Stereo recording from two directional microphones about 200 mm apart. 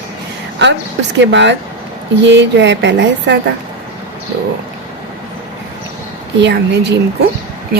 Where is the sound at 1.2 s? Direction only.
60° right (ahead or behind).